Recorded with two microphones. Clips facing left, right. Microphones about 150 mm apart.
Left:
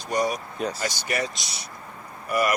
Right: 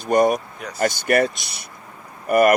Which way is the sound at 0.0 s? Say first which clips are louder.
Right 8 dB; 55° right (ahead or behind).